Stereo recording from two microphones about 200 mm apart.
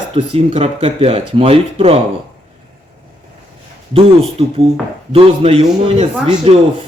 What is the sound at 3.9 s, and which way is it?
Speech, 30° right (ahead or behind).